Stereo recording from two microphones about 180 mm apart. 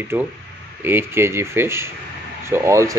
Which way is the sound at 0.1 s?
10° right (ahead or behind).